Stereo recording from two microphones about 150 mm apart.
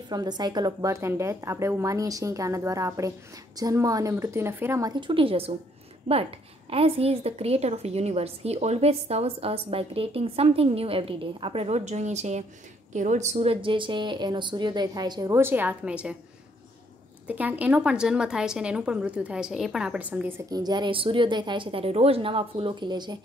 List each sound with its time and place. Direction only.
0.1 s speech: 25° right (ahead or behind)
6.7 s a woman's voice: 40° right (ahead or behind); by 16.2 s 5° right (ahead or behind)
17.3 s a woman's voice: 10° right (ahead or behind)
20.4 s a woman's voice: 25° right (ahead or behind)